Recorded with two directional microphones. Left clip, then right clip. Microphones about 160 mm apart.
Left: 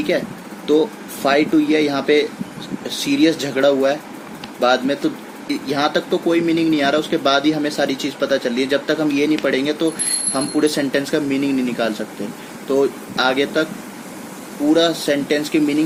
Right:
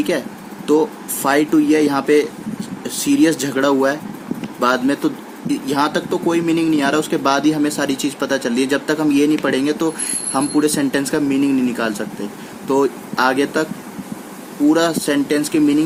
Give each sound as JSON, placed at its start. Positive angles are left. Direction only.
{"t": 1.2, "sound": "speech", "side_deg": -75}
{"t": 3.0, "sound": "speech", "side_deg": -85}
{"t": 4.6, "sound": "speech", "side_deg": -90}
{"t": 12.7, "sound": "speech", "side_deg": -85}
{"t": 14.7, "sound": "speech", "side_deg": -85}